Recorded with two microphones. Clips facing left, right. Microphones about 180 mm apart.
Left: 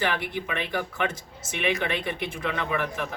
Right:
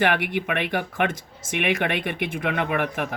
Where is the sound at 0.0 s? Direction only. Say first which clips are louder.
Right 5 dB; 65° right (ahead or behind).